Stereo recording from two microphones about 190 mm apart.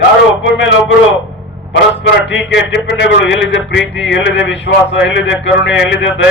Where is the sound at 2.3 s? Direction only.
70° left (ahead or behind).